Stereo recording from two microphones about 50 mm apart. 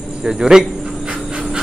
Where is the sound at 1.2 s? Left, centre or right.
Centre.